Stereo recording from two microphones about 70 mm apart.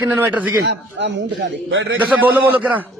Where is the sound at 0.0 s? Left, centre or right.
Right.